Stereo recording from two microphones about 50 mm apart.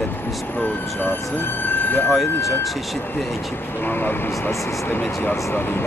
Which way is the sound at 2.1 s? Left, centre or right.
Centre.